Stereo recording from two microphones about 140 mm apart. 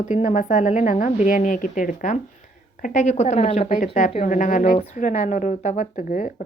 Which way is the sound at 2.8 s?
55° left (ahead or behind).